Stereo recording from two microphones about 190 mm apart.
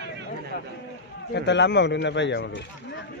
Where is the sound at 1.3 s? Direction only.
65° left (ahead or behind).